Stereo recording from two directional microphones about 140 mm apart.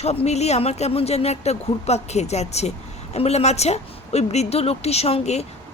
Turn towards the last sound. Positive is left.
turn(degrees=50)  # may be behind; listen again after turning